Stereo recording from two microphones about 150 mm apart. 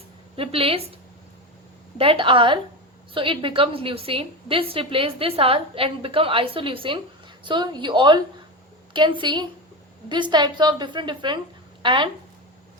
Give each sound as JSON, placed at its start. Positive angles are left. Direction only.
{"t": 0.3, "sound": "a woman's voice", "side_deg": -40}
{"t": 2.0, "sound": "a woman's voice", "side_deg": -35}